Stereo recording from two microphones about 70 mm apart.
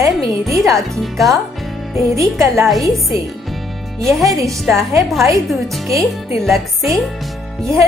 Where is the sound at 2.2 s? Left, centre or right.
Right.